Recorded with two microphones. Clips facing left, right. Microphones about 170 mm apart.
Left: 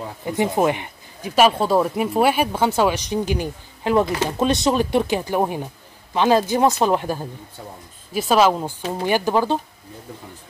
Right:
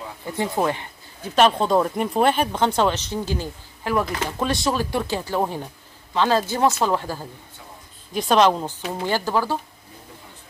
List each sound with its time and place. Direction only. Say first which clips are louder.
0.2 s speech: left 4 dB; 20° left (ahead or behind)
8.1 s a woman's voice: left 1 dB; 5° left (ahead or behind)